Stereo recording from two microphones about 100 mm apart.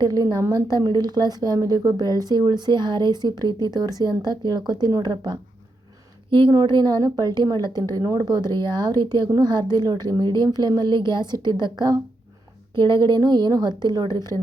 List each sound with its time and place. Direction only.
0.0 s a woman's voice: 40° right (ahead or behind)
6.5 s a woman's voice: 45° right (ahead or behind)